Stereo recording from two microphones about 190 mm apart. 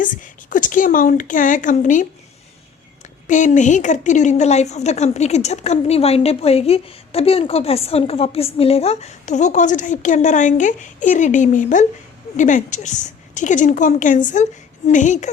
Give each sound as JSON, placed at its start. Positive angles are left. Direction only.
{"t": 0.0, "sound": "speech", "side_deg": 45}
{"t": 3.2, "sound": "a woman's voice", "side_deg": 40}